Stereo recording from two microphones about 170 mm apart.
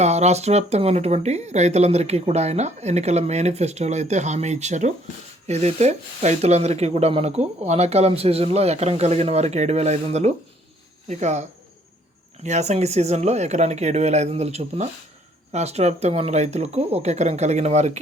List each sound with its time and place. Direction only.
0.0 s speech: 40° right (ahead or behind)